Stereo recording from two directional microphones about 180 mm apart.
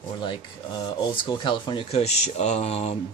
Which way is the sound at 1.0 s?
25° left (ahead or behind).